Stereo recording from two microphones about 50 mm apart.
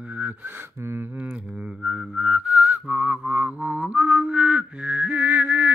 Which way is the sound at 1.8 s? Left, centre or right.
Centre.